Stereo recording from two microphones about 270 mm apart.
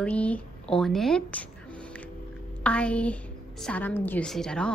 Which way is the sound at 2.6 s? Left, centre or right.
Centre.